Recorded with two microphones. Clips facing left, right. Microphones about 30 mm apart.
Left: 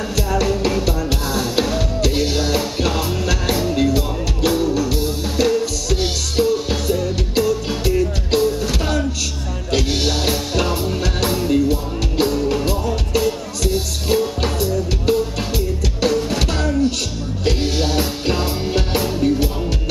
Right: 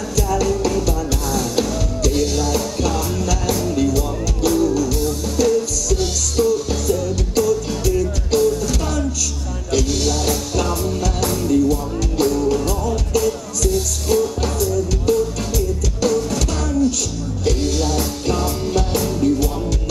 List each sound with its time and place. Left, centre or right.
0.1 s music: left